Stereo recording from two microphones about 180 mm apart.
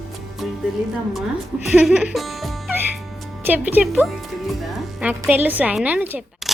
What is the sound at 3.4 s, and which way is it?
A woman's voice, 10° right (ahead or behind).